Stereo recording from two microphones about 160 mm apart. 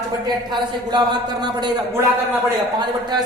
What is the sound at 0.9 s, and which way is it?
Speech, 25° right (ahead or behind).